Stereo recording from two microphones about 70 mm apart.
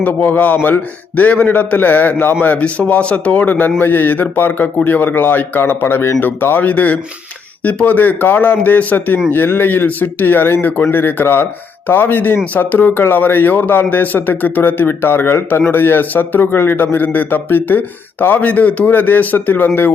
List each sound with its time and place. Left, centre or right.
0.0 s a man's voice: left